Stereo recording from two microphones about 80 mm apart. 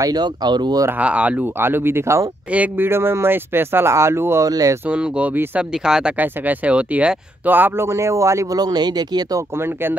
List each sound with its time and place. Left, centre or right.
0.0 s speech: right
0.9 s speech: centre
1.4 s speech: right
2.5 s speech: centre
2.9 s speech: right
4.5 s speech: right
4.8 s speech: centre
5.3 s speech: right
5.6 s speech: centre
6.1 s speech: right
8.5 s speech: right